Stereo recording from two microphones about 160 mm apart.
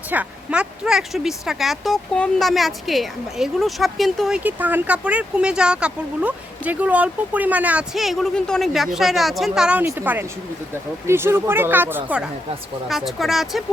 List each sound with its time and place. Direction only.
0.1 s speech: 10° right (ahead or behind)
4.4 s speech: 10° right (ahead or behind)